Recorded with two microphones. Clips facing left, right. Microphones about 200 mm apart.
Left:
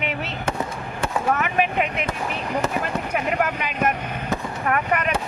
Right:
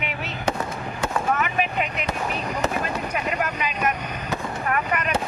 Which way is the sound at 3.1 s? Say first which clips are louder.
Left 3 dB; 55° left (ahead or behind).